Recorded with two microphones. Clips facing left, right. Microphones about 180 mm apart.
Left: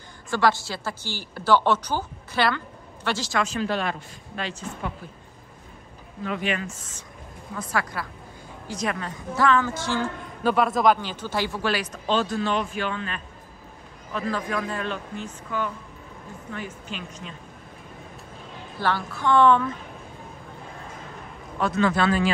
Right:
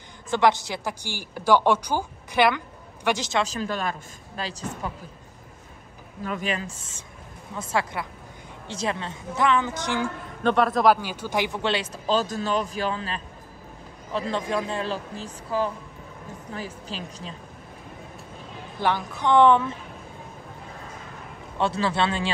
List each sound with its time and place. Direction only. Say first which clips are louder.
0.3 s a woman's voice: right 2 dB; 20° right (ahead or behind)
3.4 s speech: left 2 dB; 40° right (ahead or behind)
6.2 s speech: left 1 dB; 45° right (ahead or behind)
6.6 s a woman's voice: left 2 dB; 30° right (ahead or behind)
10.4 s a woman's voice: right 1 dB; 5° left (ahead or behind); by 12.0 s 25° right (ahead or behind)
12.1 s speech: even; 40° right (ahead or behind)
18.8 s a woman's voice: right 1 dB; 15° right (ahead or behind)
21.5 s a woman's voice: left 2 dB; 30° right (ahead or behind)